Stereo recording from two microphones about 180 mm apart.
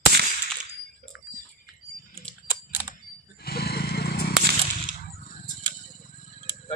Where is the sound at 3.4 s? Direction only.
60° left (ahead or behind).